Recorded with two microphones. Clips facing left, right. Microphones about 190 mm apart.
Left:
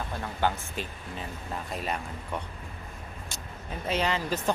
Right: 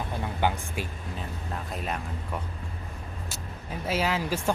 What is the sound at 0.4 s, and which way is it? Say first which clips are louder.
Speech: even; 15° right (ahead or behind).